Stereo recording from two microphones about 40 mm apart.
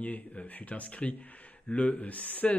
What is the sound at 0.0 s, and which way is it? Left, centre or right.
Speech, left.